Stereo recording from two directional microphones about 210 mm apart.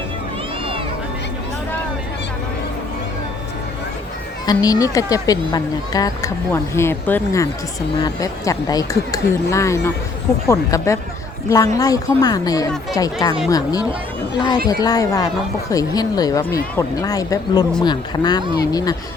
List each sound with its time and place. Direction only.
4.4 s speech: 15° left (ahead or behind)